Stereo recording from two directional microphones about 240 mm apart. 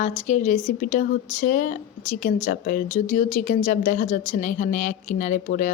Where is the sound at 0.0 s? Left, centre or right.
Left.